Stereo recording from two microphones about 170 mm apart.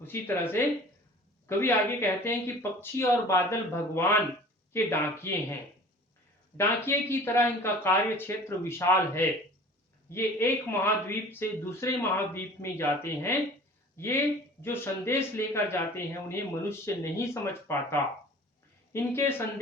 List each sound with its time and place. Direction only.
0.0 s speech: 10° left (ahead or behind)
6.6 s speech: 15° left (ahead or behind)